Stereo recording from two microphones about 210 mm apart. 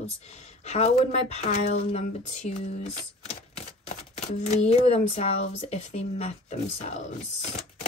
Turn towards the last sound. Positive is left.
turn(degrees=35)  # may be behind; listen again after turning